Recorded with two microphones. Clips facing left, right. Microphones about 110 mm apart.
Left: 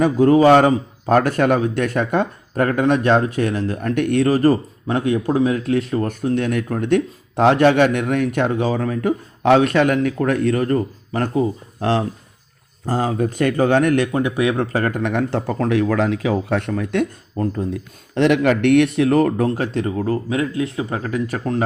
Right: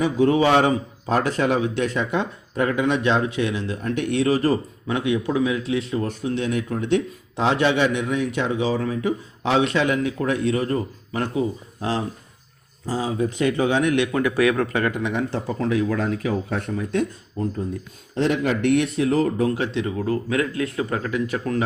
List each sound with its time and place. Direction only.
0.0 s a man's voice: 45° left (ahead or behind)
11.8 s a man's voice: 65° left (ahead or behind); by 14.1 s 45° left (ahead or behind)
14.1 s speech: 25° left (ahead or behind); by 15.6 s 60° left (ahead or behind)
15.7 s speech: 75° left (ahead or behind); by 17.7 s 60° left (ahead or behind)
18.1 s speech: 70° left (ahead or behind)
19.5 s speech: 40° left (ahead or behind)
20.3 s speech: 25° left (ahead or behind)
21.0 s speech: 40° left (ahead or behind)